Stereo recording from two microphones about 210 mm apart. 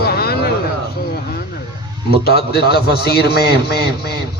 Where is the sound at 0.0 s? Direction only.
50° left (ahead or behind).